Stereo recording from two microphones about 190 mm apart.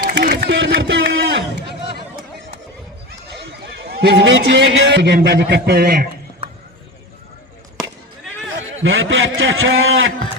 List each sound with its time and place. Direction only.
0.2 s a sound: 55° right (ahead or behind)
3.8 s a man's voice: 60° right (ahead or behind)
8.5 s a man's voice: 90° right